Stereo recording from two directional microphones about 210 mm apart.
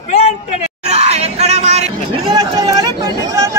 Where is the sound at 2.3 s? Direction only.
20° right (ahead or behind).